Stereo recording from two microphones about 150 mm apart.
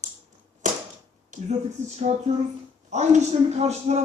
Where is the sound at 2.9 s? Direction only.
50° right (ahead or behind).